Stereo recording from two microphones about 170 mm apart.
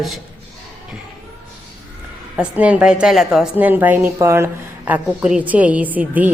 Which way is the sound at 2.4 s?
5° right (ahead or behind).